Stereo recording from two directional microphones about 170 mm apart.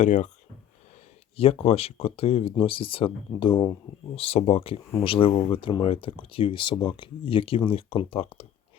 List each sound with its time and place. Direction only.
0.0 s speech: 45° left (ahead or behind)
1.4 s speech: 35° left (ahead or behind)